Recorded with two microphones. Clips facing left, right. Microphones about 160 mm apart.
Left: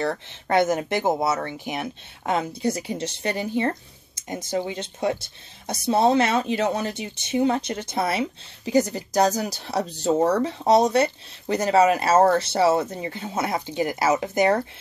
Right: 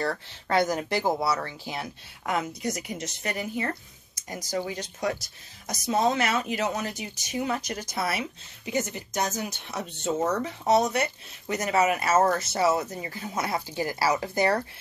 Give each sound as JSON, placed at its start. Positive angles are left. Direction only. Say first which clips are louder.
{"t": 0.0, "sound": "speech", "louder": "left 3 dB", "side_deg": 20}